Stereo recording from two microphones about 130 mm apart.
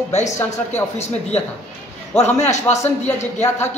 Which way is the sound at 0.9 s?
55° left (ahead or behind).